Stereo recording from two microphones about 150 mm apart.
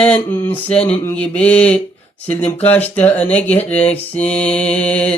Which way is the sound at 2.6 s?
10° left (ahead or behind).